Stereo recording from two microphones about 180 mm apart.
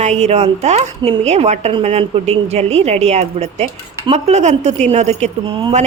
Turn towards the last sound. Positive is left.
turn(degrees=-35)  # may be behind; listen again after turning